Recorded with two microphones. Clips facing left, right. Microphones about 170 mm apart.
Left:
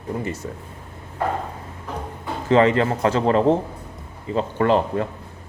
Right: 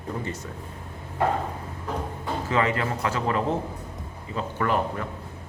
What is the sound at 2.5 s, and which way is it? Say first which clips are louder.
Speech: left 9 dB; 30° left (ahead or behind).